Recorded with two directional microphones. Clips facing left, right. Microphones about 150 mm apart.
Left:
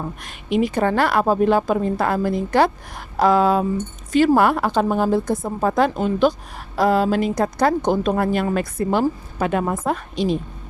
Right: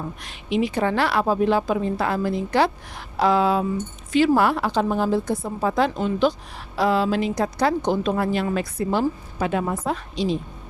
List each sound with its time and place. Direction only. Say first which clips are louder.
0.2 s a woman's voice: left 3 dB; 50° left (ahead or behind)